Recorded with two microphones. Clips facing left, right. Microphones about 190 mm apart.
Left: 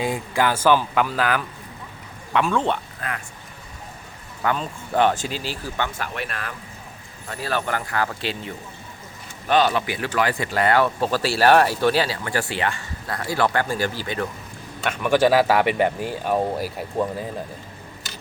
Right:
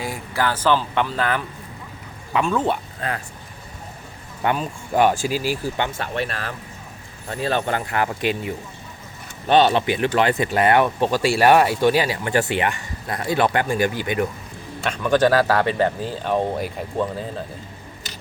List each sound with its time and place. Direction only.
0.0 s speech: 20° left (ahead or behind); by 2.7 s 5° right (ahead or behind)
3.0 s speech: 30° right (ahead or behind)
4.5 s speech: 10° right (ahead or behind)
9.5 s speech: 25° right (ahead or behind)
14.8 s speech: 10° left (ahead or behind)